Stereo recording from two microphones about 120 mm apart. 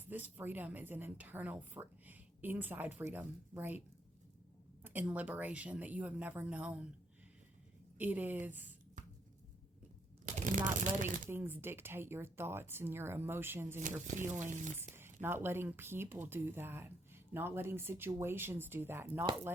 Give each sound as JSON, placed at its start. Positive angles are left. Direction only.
{"t": 0.0, "sound": "a woman's voice", "side_deg": -15}
{"t": 4.8, "sound": "a woman's voice", "side_deg": -15}
{"t": 7.9, "sound": "a woman's voice", "side_deg": -15}
{"t": 9.0, "sound": "a sound", "side_deg": -90}
{"t": 10.2, "sound": "crumpling", "side_deg": -85}
{"t": 10.8, "sound": "speech", "side_deg": -90}
{"t": 11.3, "sound": "speech", "side_deg": -15}
{"t": 13.7, "sound": "speech", "side_deg": -90}
{"t": 14.3, "sound": "speech", "side_deg": -20}